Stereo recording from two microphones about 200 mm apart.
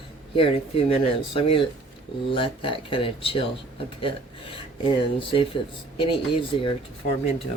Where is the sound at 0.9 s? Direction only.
30° left (ahead or behind).